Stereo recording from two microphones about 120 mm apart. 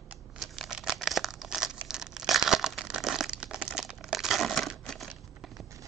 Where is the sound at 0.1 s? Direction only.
5° right (ahead or behind).